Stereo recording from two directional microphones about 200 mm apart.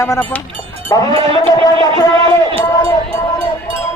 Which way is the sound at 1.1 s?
30° right (ahead or behind).